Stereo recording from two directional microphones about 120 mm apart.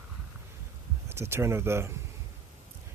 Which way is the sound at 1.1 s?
20° right (ahead or behind).